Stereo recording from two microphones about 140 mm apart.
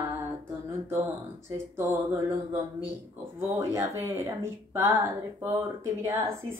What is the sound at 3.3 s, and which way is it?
Speech, 20° right (ahead or behind).